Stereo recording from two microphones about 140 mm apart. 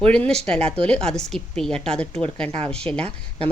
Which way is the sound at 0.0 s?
5° left (ahead or behind).